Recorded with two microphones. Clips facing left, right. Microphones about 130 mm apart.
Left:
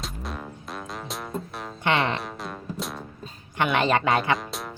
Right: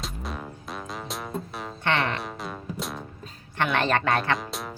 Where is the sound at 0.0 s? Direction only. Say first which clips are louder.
Even; centre (ahead or behind).